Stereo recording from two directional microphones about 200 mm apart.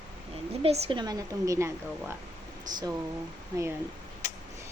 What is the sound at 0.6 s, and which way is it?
A woman's voice, 25° right (ahead or behind).